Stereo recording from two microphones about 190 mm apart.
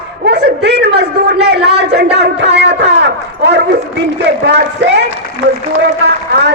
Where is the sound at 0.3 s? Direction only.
60° right (ahead or behind).